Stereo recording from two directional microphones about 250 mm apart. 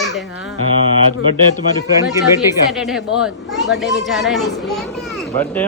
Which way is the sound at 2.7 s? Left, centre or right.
Centre.